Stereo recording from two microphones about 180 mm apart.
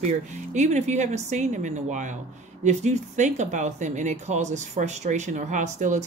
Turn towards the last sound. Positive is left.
turn(degrees=-40)  # may be behind; listen again after turning